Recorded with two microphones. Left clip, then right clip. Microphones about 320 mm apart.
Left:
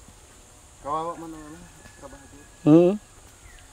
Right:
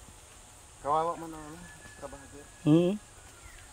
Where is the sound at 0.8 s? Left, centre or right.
Centre.